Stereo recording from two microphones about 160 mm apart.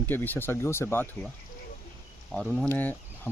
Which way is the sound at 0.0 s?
10° left (ahead or behind).